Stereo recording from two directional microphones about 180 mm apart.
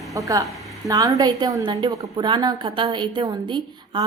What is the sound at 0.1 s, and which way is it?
Speech, 15° right (ahead or behind).